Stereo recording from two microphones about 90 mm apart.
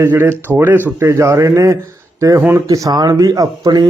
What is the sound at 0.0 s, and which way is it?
A man's voice, 25° right (ahead or behind).